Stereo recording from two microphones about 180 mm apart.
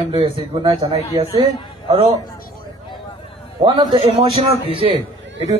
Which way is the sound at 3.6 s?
25° right (ahead or behind).